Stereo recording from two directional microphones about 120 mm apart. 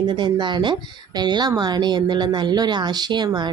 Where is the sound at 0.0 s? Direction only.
40° right (ahead or behind).